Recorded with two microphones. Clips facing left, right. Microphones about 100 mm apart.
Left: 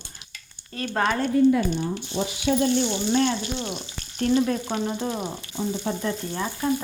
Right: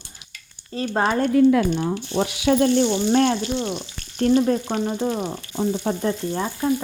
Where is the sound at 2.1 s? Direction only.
70° right (ahead or behind).